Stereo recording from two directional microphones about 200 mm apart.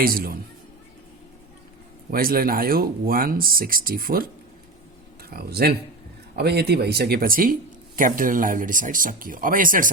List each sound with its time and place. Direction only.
0.0 s speech: 45° right (ahead or behind)
2.0 s speech: 45° right (ahead or behind)
5.3 s speech: 50° right (ahead or behind)